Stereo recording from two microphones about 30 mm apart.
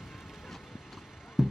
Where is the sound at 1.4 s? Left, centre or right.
Centre.